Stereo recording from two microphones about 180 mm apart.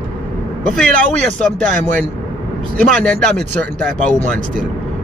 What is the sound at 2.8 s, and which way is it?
Speech, 5° left (ahead or behind).